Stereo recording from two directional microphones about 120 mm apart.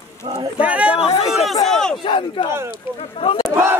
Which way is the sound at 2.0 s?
45° left (ahead or behind).